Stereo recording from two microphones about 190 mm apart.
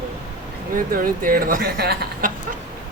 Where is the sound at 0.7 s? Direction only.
50° right (ahead or behind).